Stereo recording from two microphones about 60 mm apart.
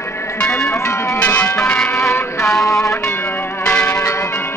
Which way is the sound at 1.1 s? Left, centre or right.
Left.